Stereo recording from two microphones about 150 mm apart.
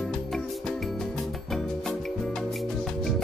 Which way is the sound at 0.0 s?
Centre (ahead or behind).